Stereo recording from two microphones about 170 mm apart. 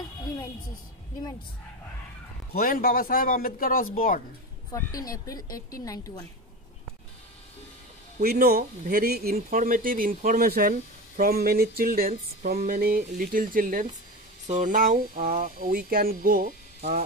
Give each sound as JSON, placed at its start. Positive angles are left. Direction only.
{"t": 2.5, "sound": "speech", "side_deg": 60}
{"t": 5.2, "sound": "speech", "side_deg": 20}
{"t": 8.2, "sound": "speech", "side_deg": -65}